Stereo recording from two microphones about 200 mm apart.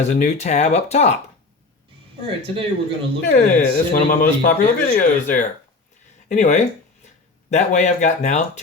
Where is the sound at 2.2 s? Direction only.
25° right (ahead or behind).